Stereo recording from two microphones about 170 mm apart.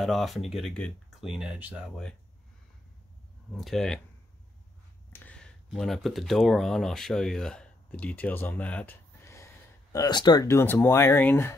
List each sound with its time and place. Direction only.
0.0 s speech: centre (ahead or behind)
3.5 s speech: centre (ahead or behind)
5.1 s a sound: 10° left (ahead or behind)
5.7 s speech: centre (ahead or behind)